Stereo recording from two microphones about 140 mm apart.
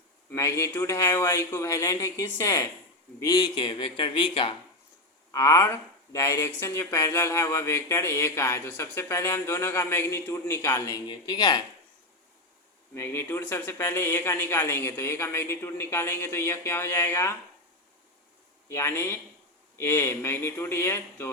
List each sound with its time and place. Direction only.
0.3 s speech: 20° left (ahead or behind); by 4.5 s 35° left (ahead or behind)
5.3 s speech: 25° left (ahead or behind)
12.9 s speech: 15° left (ahead or behind)
18.7 s speech: 20° left (ahead or behind)